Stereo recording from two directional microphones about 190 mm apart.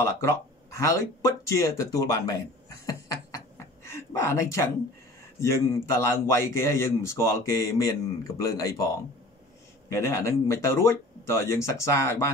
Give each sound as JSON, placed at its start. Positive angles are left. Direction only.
{"t": 0.0, "sound": "speech", "side_deg": 15}
{"t": 2.9, "sound": "a sound", "side_deg": 15}
{"t": 5.4, "sound": "speech", "side_deg": 15}